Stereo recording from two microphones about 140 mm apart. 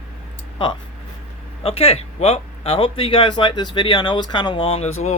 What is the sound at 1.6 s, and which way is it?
Speech, 45° left (ahead or behind).